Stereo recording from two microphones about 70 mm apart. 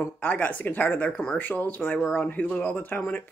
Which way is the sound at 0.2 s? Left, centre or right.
Left.